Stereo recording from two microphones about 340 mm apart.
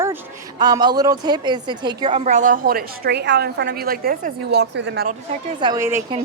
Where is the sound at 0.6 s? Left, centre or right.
Centre; by 5.1 s right.